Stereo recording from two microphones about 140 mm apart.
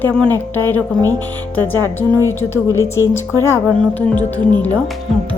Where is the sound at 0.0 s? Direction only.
10° left (ahead or behind).